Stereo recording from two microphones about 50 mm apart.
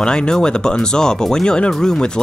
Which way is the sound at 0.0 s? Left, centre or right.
Centre.